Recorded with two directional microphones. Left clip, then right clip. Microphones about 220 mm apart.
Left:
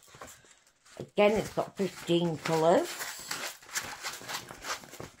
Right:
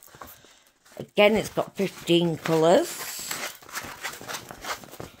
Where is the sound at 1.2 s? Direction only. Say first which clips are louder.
Right 5 dB; 50° right (ahead or behind).